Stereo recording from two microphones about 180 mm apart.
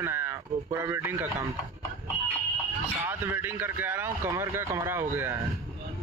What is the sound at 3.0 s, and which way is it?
A man's voice, 10° right (ahead or behind).